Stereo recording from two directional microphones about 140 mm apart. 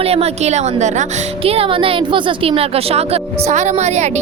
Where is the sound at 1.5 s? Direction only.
40° right (ahead or behind).